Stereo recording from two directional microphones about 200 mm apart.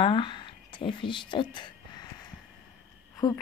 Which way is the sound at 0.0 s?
25° left (ahead or behind).